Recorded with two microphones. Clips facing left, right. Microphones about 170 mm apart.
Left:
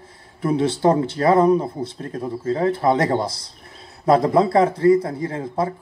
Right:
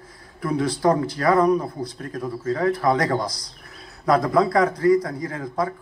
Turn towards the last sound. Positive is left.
turn(degrees=25)  # may be behind; listen again after turning